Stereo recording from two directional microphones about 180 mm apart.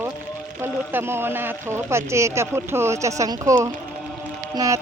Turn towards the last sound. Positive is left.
turn(degrees=-15)  # may be behind; listen again after turning